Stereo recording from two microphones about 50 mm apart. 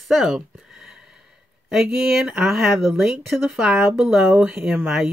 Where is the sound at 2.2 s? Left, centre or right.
Centre.